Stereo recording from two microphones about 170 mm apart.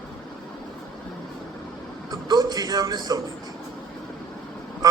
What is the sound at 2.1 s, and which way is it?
A man's voice, 25° right (ahead or behind).